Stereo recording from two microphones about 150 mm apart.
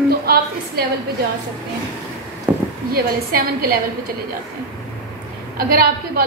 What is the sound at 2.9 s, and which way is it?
Speech, 85° right.